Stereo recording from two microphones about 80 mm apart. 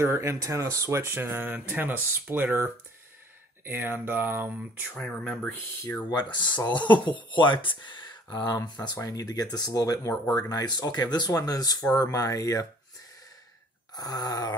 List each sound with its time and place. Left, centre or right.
0.0 s speech: right
4.9 s speech: centre
5.5 s speech: left
6.0 s speech: left
7.2 s speech: left
13.9 s speech: left